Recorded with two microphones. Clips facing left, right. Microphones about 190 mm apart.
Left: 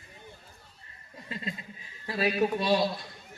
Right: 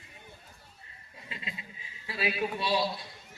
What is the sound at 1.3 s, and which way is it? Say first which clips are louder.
A man's voice: left 6 dB; 45° left (ahead or behind).